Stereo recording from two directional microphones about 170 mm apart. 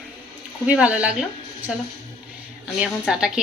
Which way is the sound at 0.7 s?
5° right (ahead or behind).